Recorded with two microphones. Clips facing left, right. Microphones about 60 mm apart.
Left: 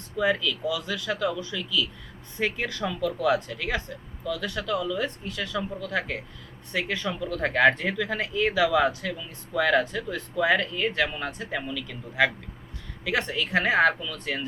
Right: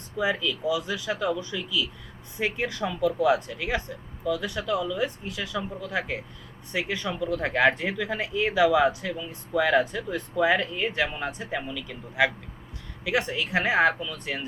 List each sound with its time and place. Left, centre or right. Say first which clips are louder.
0.2 s speech: left 1 dB; centre
9.1 s speech: right 2 dB; centre
9.6 s speech: left 1 dB; centre